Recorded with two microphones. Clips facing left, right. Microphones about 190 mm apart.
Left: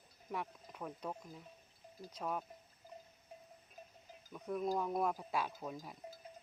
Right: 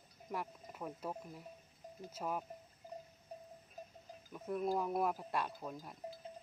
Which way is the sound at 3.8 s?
40° right (ahead or behind).